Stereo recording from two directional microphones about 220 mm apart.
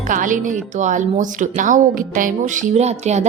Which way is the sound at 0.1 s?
35° right (ahead or behind).